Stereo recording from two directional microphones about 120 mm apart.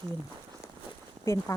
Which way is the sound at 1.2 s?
25° left (ahead or behind).